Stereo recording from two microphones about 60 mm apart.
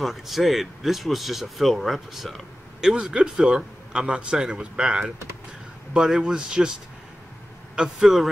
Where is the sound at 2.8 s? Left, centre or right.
Centre.